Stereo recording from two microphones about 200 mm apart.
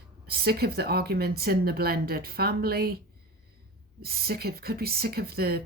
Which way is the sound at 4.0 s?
50° right (ahead or behind).